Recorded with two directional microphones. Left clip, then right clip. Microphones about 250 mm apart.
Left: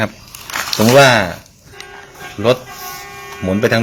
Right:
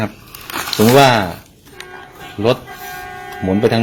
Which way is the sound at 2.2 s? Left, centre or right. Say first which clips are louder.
Left 2 dB; centre.